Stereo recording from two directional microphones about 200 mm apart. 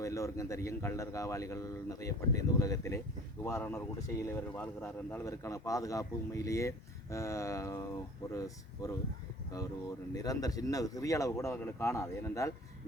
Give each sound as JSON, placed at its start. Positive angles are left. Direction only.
{"t": 0.0, "sound": "speech", "side_deg": 15}
{"t": 10.2, "sound": "speech", "side_deg": 20}